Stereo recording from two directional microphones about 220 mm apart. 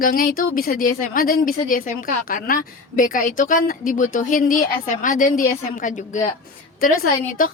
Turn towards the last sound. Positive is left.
turn(degrees=40)  # may be behind; listen again after turning